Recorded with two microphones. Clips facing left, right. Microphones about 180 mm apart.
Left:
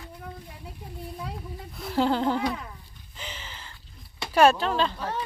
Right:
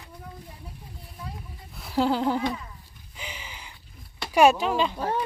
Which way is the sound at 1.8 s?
5° right (ahead or behind).